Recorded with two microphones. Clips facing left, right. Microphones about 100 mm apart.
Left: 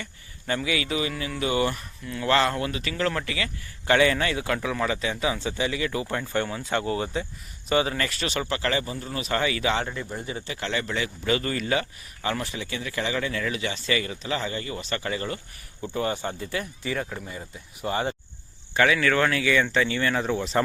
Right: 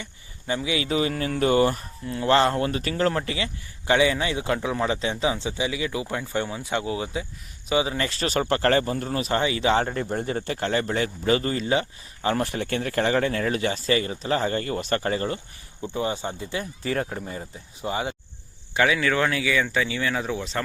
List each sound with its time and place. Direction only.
0.0 s speech: 15° right (ahead or behind)
3.8 s speech: 15° right (ahead or behind)
7.9 s speech: 30° right (ahead or behind); by 9.2 s 50° right (ahead or behind)
9.3 s speech: 25° right (ahead or behind)
9.9 s speech: 50° right (ahead or behind); by 12.4 s 30° right (ahead or behind)
12.4 s speech: 55° right (ahead or behind); by 15.4 s 35° right (ahead or behind)
15.9 s speech: 20° right (ahead or behind)
16.8 s speech: 40° right (ahead or behind)
17.8 s speech: 10° right (ahead or behind)